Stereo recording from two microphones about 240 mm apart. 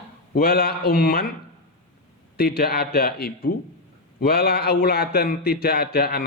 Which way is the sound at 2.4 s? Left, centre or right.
Left.